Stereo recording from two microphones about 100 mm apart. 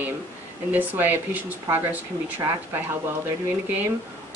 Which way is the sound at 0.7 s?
20° right (ahead or behind).